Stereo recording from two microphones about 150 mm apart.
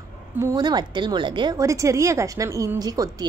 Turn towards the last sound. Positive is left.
turn(degrees=-25)  # may be behind; listen again after turning